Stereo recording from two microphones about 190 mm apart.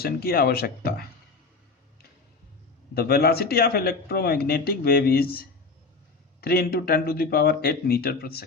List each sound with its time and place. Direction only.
0.0 s a man's voice: 55° left (ahead or behind)
2.9 s a man's voice: 55° left (ahead or behind)